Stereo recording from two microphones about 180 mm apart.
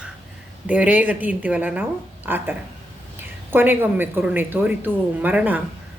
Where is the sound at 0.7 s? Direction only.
10° right (ahead or behind).